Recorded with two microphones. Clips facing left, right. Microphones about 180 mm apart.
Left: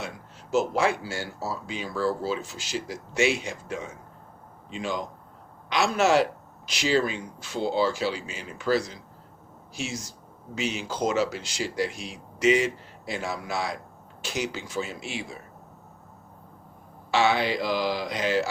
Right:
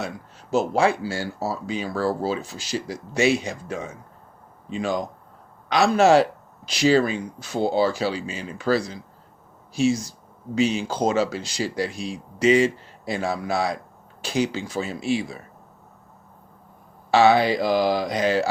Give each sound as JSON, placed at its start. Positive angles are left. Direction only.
{"t": 0.5, "sound": "speech", "side_deg": -30}
{"t": 17.1, "sound": "speech", "side_deg": -35}